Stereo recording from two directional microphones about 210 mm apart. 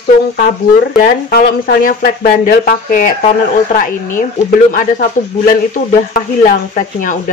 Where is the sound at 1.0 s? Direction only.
45° left (ahead or behind).